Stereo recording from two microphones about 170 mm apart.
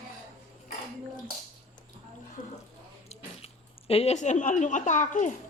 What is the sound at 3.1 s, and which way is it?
Speech, 35° left (ahead or behind).